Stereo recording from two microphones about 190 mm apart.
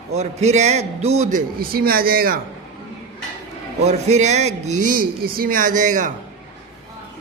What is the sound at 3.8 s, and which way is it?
Speech, 35° right (ahead or behind).